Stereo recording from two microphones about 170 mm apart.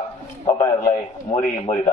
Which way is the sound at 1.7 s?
40° left (ahead or behind).